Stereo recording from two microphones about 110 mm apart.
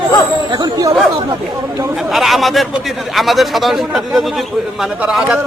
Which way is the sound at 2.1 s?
Centre (ahead or behind).